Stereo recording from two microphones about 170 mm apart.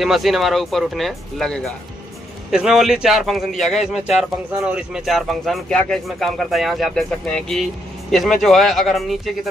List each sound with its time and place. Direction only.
0.0 s speech: centre (ahead or behind)